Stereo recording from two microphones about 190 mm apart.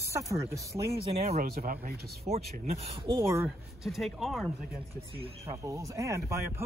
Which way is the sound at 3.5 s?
Centre (ahead or behind).